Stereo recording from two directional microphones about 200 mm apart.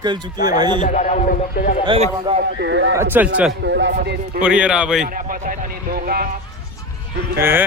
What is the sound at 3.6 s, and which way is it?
Speech, 60° right (ahead or behind).